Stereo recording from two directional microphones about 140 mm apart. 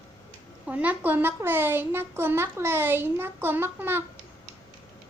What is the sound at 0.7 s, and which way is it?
A child's voice, 10° right (ahead or behind).